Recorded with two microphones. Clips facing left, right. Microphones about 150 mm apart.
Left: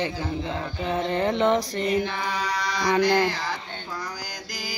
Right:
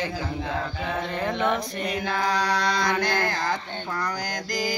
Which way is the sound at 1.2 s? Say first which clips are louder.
Left 3 dB; 20° left (ahead or behind).